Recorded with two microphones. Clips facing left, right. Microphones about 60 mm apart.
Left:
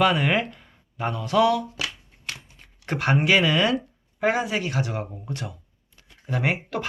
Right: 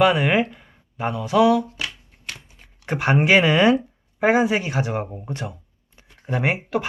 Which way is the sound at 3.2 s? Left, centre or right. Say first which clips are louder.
Right 4 dB; right.